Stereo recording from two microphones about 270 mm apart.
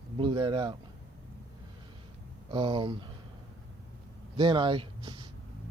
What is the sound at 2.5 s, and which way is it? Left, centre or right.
Speech, centre.